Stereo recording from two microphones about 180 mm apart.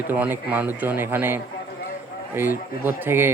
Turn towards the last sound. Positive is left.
turn(degrees=-10)  # may be behind; listen again after turning